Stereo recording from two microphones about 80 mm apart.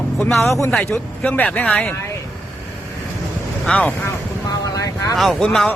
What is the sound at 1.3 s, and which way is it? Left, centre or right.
Speech, centre.